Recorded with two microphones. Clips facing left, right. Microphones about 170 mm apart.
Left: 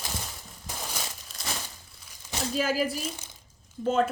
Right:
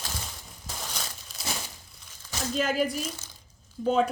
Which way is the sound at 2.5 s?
5° left (ahead or behind).